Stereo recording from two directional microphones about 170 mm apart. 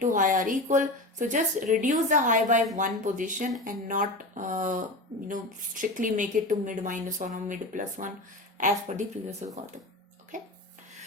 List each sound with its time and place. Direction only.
0.0 s a woman's voice: 50° right (ahead or behind)